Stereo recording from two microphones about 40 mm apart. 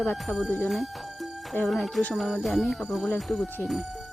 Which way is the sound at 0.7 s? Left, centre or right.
Centre.